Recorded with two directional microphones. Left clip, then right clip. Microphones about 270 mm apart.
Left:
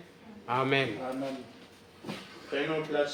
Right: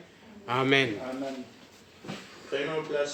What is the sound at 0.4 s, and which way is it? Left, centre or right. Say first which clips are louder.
Speech: right 3 dB; right.